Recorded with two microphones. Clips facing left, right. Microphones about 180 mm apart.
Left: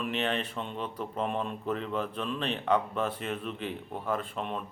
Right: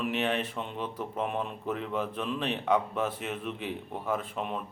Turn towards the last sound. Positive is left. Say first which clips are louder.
# right 1 dB
turn(degrees=-10)  # may be behind; listen again after turning